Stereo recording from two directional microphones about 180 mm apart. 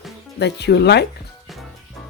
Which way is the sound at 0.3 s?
70° left (ahead or behind).